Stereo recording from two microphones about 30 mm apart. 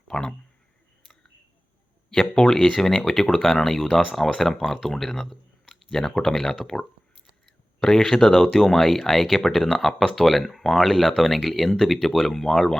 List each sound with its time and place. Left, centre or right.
0.1 s speech: left
2.0 s a sound: centre
2.5 s speech: centre